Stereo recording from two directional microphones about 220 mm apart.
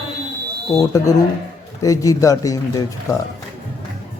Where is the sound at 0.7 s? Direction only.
15° left (ahead or behind).